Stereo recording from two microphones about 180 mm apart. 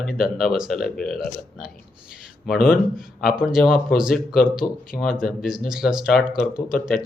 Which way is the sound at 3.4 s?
Centre (ahead or behind).